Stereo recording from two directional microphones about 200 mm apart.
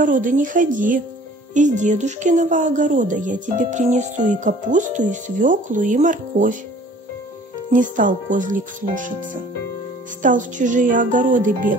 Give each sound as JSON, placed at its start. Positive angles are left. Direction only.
{"t": 0.0, "sound": "speech", "side_deg": -40}
{"t": 7.7, "sound": "speech", "side_deg": -40}